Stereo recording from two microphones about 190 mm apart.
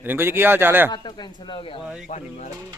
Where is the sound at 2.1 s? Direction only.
40° left (ahead or behind).